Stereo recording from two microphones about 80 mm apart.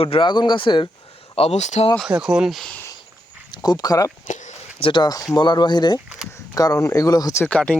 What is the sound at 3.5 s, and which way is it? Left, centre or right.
Speech, left.